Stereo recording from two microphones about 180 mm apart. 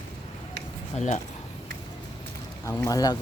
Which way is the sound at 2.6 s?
20° left (ahead or behind).